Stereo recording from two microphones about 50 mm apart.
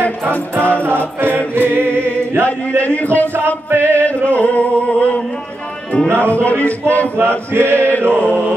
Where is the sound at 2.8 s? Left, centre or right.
Left.